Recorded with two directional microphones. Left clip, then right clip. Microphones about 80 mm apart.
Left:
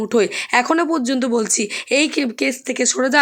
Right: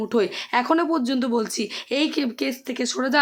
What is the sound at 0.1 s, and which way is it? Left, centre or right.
Speech, left.